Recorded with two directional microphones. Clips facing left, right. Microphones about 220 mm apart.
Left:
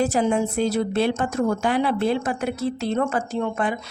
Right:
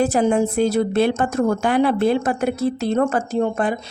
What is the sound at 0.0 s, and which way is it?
A woman's voice, 50° right (ahead or behind).